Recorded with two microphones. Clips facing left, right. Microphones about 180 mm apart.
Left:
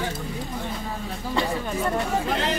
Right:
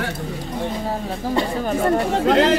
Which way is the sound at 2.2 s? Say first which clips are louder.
Right 10 dB; 85° right.